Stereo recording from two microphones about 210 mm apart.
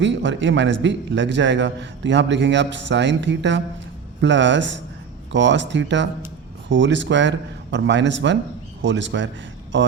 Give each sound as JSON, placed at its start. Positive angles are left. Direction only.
{"t": 0.0, "sound": "a man's voice", "side_deg": -60}